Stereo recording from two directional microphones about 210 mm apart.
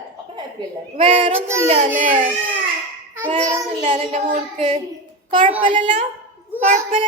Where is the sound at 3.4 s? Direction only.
30° right (ahead or behind).